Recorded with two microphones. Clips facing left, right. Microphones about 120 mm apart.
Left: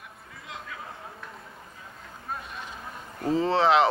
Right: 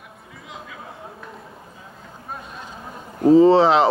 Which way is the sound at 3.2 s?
35° right (ahead or behind).